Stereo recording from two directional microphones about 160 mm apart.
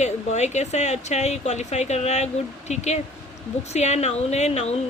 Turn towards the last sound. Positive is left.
turn(degrees=45)  # may be behind; listen again after turning